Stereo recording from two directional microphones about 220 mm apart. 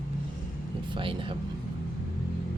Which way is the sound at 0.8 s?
20° right (ahead or behind).